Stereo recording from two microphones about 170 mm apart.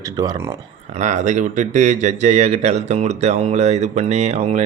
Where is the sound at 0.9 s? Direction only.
45° right (ahead or behind).